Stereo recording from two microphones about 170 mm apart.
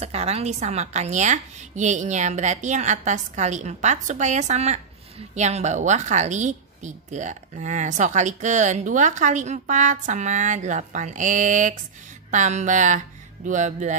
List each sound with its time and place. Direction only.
0.0 s a woman's voice: 35° right (ahead or behind)